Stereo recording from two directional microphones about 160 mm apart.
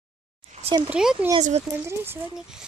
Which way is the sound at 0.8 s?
5° right (ahead or behind).